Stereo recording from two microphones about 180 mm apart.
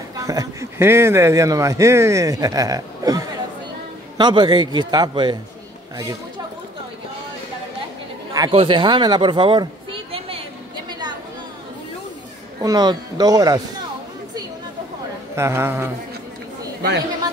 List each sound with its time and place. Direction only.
0.1 s a man's voice: 20° right (ahead or behind)
8.3 s chatter: 20° right (ahead or behind)
8.5 s speech: 25° right (ahead or behind)
10.9 s a sound: 25° right (ahead or behind)
12.6 s a man's voice: 20° right (ahead or behind)
15.3 s a man's voice: 15° right (ahead or behind)